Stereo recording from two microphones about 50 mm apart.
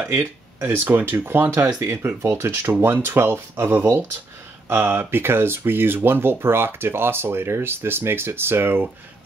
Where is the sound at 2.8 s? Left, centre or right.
Right.